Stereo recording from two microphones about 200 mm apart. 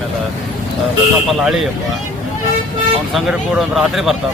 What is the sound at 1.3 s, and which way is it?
Speech, centre (ahead or behind).